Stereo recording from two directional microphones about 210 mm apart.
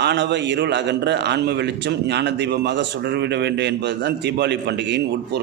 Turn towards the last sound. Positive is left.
turn(degrees=-55)  # may be behind; listen again after turning